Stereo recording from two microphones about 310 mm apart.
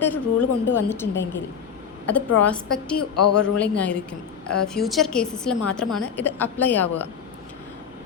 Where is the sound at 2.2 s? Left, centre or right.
Left.